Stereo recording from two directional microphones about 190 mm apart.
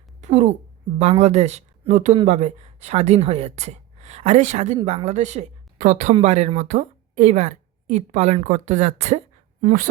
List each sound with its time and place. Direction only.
0.2 s a woman's voice: 35° right (ahead or behind)